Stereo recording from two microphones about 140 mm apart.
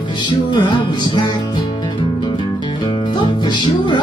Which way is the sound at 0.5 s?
35° left (ahead or behind).